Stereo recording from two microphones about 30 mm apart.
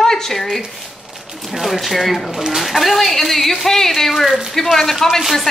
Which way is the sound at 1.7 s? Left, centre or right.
Centre.